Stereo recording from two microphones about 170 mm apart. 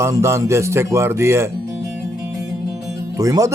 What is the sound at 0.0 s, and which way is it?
Speech, 15° right (ahead or behind).